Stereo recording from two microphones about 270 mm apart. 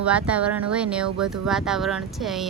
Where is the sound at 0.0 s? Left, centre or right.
Centre.